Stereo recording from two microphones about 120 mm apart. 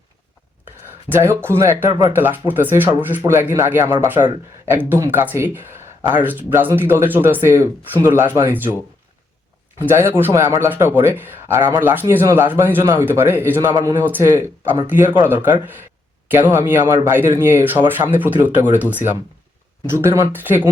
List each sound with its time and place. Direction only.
1.1 s speech: 20° right (ahead or behind)
1.9 s speech: 35° right (ahead or behind)
2.1 s speech: 20° right (ahead or behind)
9.8 s speech: 20° right (ahead or behind)
16.6 s speech: 20° right (ahead or behind)